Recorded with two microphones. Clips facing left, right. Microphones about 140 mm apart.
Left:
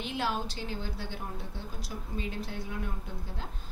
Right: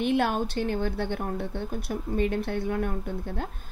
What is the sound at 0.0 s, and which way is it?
A woman's voice, 55° right (ahead or behind).